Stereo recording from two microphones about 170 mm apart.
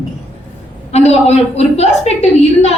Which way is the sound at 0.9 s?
40° left (ahead or behind).